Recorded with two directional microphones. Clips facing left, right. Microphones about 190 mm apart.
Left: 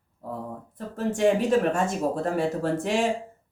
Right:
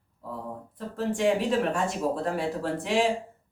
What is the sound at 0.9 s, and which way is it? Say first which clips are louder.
Speech: left 3 dB; 45° left (ahead or behind).